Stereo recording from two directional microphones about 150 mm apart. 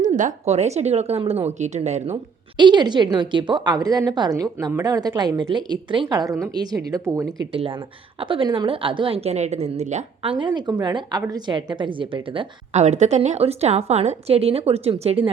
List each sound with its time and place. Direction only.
0.0 s a woman's voice: 60° right (ahead or behind)
2.6 s a woman's voice: 30° right (ahead or behind)
7.5 s a woman's voice: 35° right (ahead or behind)
10.3 s a woman's voice: 30° right (ahead or behind)
12.7 s a woman's voice: 50° right (ahead or behind)